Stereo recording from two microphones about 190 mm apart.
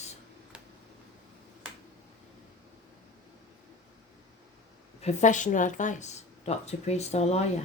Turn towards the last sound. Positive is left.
turn(degrees=35)  # may be behind; listen again after turning